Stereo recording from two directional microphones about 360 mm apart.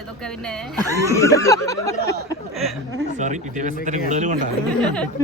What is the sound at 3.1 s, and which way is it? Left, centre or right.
Speech, centre.